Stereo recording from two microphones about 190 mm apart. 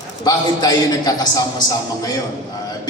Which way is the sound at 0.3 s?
20° left (ahead or behind).